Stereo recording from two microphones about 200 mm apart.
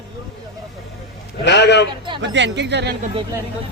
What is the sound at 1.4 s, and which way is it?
Speech, 60° left (ahead or behind).